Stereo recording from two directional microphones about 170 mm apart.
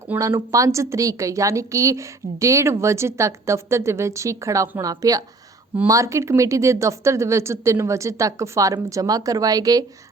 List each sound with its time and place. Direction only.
0.1 s speech: 20° right (ahead or behind)